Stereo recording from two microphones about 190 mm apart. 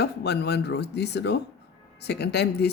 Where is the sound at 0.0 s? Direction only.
60° left (ahead or behind).